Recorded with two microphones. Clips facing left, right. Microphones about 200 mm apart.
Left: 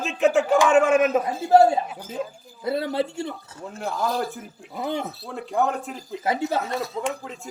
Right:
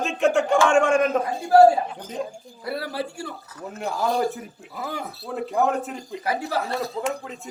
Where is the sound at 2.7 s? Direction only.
20° left (ahead or behind).